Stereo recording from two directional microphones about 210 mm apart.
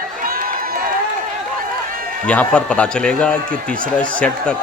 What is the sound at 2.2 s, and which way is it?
A man's voice, 5° left (ahead or behind).